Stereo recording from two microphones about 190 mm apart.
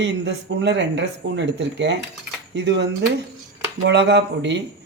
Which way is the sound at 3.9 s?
65° right (ahead or behind).